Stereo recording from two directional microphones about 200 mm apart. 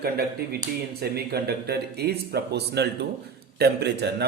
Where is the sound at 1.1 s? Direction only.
50° right (ahead or behind).